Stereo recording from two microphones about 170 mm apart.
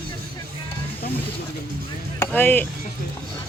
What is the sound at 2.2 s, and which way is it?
Speech, 10° left (ahead or behind).